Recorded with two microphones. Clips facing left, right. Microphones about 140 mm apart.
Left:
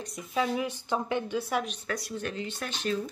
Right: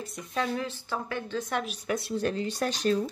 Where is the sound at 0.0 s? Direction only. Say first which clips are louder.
Left 1 dB; centre (ahead or behind).